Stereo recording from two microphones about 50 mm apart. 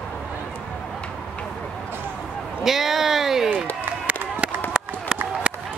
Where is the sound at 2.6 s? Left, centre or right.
Centre.